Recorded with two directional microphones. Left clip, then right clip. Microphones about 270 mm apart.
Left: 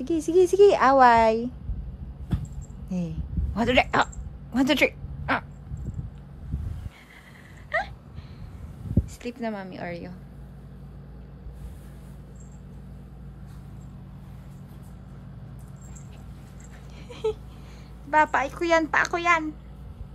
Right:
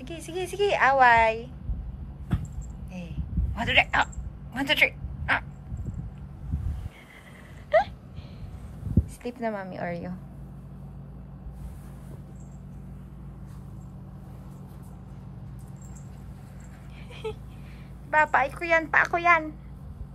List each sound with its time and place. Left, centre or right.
0.1 s a woman's voice: centre
3.5 s a woman's voice: centre
7.7 s a sound: centre
9.2 s a woman's voice: centre
17.1 s a sound: centre
18.1 s a woman's voice: centre